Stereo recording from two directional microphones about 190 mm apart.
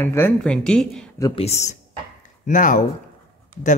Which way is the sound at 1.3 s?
35° left (ahead or behind).